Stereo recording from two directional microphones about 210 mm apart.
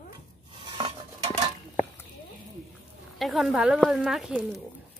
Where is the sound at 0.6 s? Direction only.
20° right (ahead or behind).